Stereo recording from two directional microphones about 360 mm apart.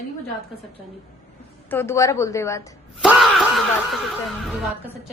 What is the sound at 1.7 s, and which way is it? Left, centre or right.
A woman's voice, centre.